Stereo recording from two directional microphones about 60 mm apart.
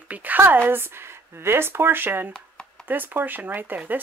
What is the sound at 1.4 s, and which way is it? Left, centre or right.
Speech, right.